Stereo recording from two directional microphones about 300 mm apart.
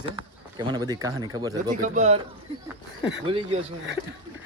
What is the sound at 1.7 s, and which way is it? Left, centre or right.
Speech, right.